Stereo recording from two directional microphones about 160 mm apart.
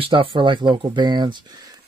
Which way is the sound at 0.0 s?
30° right (ahead or behind).